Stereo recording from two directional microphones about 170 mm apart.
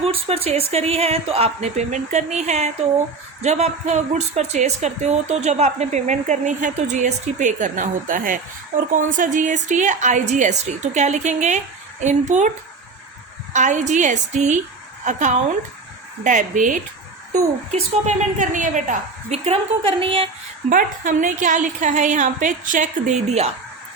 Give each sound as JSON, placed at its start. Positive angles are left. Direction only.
{"t": 0.0, "sound": "a woman's voice", "side_deg": -35}
{"t": 13.5, "sound": "a woman's voice", "side_deg": -45}
{"t": 20.7, "sound": "a woman's voice", "side_deg": -50}